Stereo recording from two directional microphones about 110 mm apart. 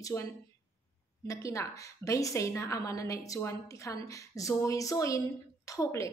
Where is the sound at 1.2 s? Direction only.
30° left (ahead or behind).